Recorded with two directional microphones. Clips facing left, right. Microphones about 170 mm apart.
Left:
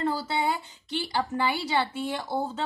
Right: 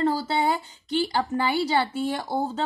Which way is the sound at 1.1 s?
40° right (ahead or behind).